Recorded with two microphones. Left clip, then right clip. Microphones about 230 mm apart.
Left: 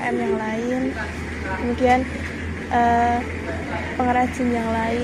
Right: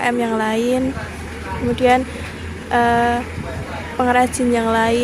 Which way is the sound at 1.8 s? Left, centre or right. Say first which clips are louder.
Right 3 dB; right.